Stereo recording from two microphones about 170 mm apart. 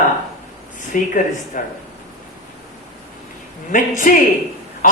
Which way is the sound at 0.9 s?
50° left (ahead or behind).